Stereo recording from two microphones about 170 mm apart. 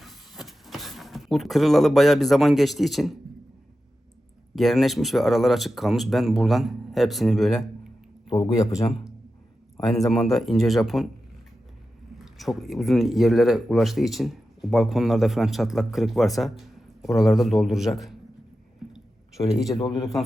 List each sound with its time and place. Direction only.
0.0 s a sound: centre (ahead or behind)
4.5 s speech: centre (ahead or behind)
8.3 s a man's voice: 20° left (ahead or behind)
9.8 s speech: centre (ahead or behind)
12.1 s speech: centre (ahead or behind)
18.9 s a sound: centre (ahead or behind)